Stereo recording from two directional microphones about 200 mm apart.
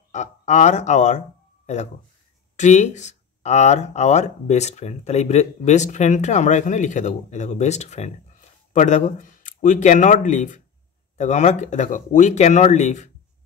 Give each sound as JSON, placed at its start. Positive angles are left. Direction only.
{"t": 0.1, "sound": "speech", "side_deg": 35}
{"t": 2.5, "sound": "speech", "side_deg": 35}